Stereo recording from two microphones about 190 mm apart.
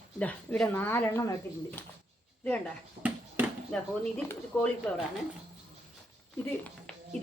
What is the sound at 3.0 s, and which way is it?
Speech, 30° right (ahead or behind).